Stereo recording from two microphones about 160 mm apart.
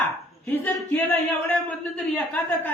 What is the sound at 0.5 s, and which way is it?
A man's voice, 10° left (ahead or behind).